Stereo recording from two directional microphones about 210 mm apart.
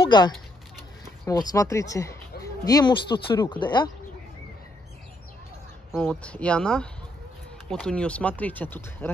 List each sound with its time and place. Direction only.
0.0 s speech: 20° left (ahead or behind)
5.9 s speech: 5° left (ahead or behind)